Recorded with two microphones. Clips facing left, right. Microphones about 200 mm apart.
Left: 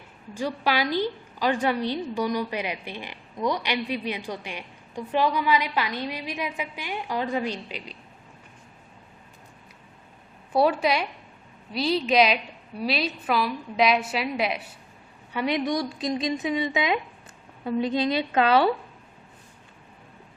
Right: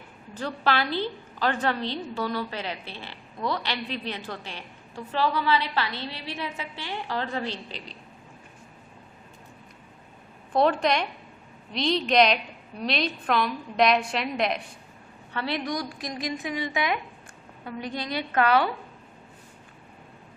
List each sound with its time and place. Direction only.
0.3 s a woman's voice: 10° left (ahead or behind)
10.5 s a woman's voice: 5° left (ahead or behind); by 18.7 s 25° left (ahead or behind)